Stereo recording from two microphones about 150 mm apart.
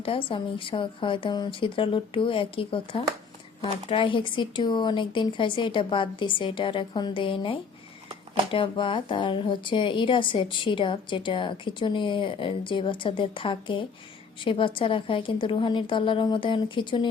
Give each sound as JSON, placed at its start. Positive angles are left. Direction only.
{"t": 0.0, "sound": "speech", "side_deg": 35}